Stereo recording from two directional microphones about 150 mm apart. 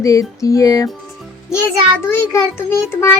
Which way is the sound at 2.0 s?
15° left (ahead or behind).